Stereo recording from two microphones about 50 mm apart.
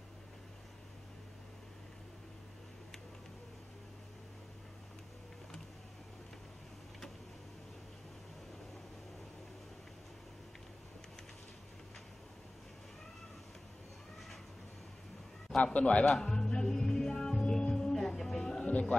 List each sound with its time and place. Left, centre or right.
15.5 s music: left
18.7 s music: left